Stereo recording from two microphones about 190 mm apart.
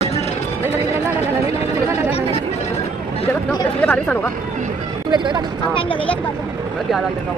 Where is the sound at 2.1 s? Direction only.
30° left (ahead or behind).